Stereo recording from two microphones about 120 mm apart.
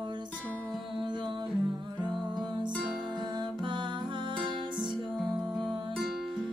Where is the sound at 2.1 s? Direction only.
40° right (ahead or behind).